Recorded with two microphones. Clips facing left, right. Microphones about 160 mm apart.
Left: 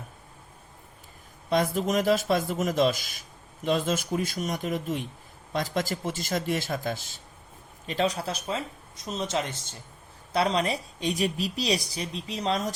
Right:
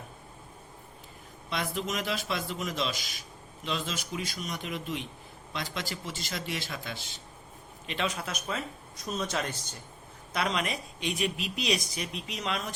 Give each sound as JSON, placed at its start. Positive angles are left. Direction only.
{"t": 1.5, "sound": "a man's voice", "side_deg": 40}